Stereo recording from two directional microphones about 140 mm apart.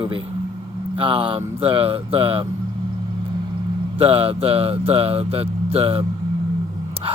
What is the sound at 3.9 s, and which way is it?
Speech, 40° right (ahead or behind).